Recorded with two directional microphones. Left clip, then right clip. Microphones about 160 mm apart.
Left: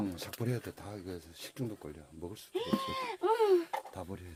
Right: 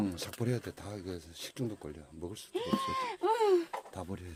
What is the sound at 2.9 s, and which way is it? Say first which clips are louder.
Speech: even; 25° right (ahead or behind).